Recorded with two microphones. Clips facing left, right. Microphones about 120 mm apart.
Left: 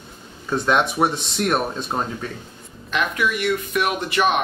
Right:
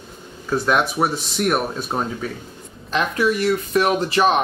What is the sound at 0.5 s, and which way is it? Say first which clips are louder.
Speech: even; 5° right (ahead or behind).